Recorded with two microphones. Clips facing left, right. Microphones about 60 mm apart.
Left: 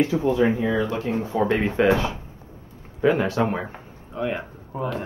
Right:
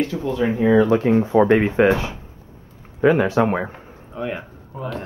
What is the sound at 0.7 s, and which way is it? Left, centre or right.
Speech, right.